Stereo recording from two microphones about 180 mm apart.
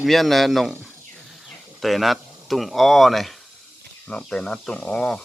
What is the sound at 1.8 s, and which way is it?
Speech, centre (ahead or behind).